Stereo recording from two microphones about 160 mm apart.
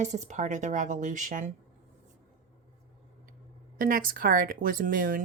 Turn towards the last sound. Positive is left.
turn(degrees=-60)  # may be behind; listen again after turning